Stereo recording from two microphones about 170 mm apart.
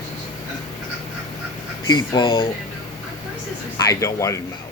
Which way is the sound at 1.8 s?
25° left (ahead or behind).